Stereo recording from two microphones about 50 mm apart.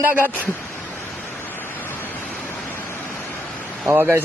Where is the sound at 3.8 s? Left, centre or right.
Right.